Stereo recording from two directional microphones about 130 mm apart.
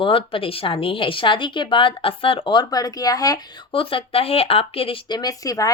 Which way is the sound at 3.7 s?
45° left (ahead or behind).